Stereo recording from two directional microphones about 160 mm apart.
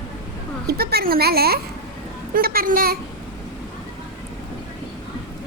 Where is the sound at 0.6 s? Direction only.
75° right (ahead or behind).